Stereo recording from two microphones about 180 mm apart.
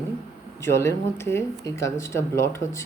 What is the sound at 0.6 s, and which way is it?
Speech, 15° left (ahead or behind).